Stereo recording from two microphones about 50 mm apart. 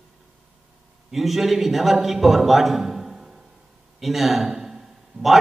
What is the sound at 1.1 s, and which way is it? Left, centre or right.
A man's voice, centre.